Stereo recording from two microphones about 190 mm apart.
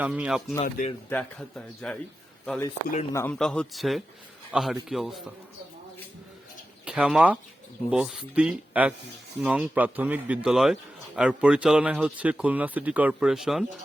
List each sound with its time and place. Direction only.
0.0 s speech: 5° right (ahead or behind)
0.6 s a man's voice: 40° left (ahead or behind)
1.1 s speech: 5° left (ahead or behind)
3.1 s a man's voice: 15° left (ahead or behind)
3.3 s speech: 5° left (ahead or behind)
6.8 s a man's voice: 5° right (ahead or behind)